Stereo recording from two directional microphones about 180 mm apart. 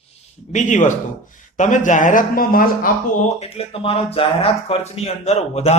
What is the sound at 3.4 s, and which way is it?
Speech, 35° left (ahead or behind).